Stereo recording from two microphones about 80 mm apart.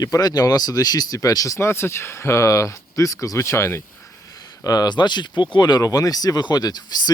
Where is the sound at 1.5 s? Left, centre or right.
Left.